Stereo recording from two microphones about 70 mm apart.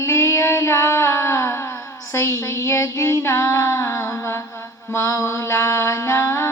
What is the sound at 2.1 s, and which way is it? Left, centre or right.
Female singing, left.